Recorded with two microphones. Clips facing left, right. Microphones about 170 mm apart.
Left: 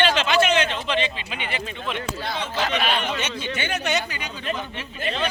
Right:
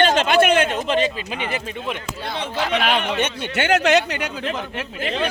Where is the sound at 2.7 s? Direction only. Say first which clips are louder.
Right 7 dB; 70° right (ahead or behind); by 4.5 s 90° right.